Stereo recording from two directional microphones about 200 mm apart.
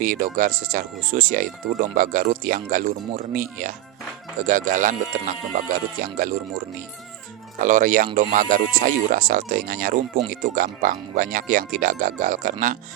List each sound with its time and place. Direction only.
0.0 s speech: 40° right (ahead or behind)
4.4 s speech: 40° right (ahead or behind)
7.6 s speech: 40° right (ahead or behind)